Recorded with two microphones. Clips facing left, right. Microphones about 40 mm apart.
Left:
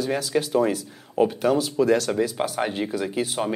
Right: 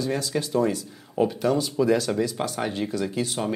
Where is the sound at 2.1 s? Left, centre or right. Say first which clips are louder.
Left 2 dB; centre.